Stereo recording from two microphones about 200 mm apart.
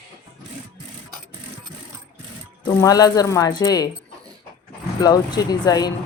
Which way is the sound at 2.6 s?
20° left (ahead or behind).